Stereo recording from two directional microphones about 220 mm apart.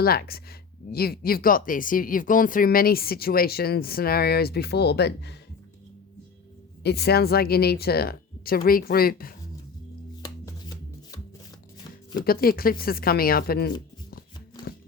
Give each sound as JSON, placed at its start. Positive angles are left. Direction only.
{"t": 0.0, "sound": "speech", "side_deg": 45}
{"t": 6.8, "sound": "speech", "side_deg": 45}
{"t": 12.2, "sound": "speech", "side_deg": 45}